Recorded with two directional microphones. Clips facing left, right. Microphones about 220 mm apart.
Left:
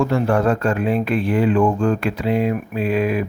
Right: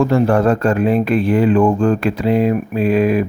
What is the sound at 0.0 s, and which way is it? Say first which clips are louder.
Speech: right 4 dB; 35° right (ahead or behind).